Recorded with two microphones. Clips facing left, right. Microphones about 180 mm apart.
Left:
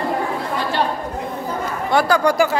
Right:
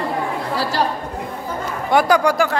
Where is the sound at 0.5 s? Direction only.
40° right (ahead or behind).